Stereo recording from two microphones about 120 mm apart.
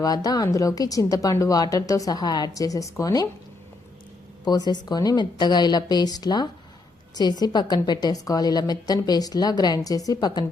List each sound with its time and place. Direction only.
0.0 s speech: 30° left (ahead or behind)
4.4 s a woman's voice: 35° left (ahead or behind)